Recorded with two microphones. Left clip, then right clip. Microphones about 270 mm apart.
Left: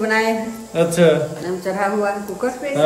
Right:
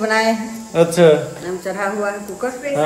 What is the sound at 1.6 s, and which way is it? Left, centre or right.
Speech, centre.